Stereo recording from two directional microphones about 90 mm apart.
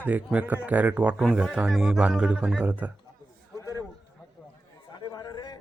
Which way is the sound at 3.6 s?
40° left (ahead or behind).